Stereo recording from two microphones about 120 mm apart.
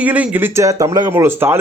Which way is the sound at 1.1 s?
20° right (ahead or behind).